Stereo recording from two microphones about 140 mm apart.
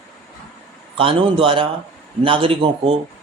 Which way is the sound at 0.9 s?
40° right (ahead or behind).